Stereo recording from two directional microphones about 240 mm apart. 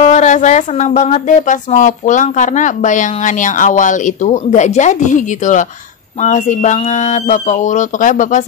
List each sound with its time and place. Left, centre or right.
0.0 s speech: left